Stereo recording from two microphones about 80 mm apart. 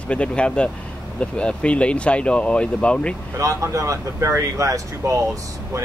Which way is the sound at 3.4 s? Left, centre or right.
Right.